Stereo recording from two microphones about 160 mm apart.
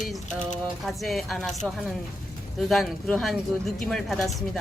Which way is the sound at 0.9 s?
Centre (ahead or behind).